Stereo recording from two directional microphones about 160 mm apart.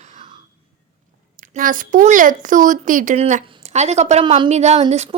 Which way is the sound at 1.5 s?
60° right (ahead or behind).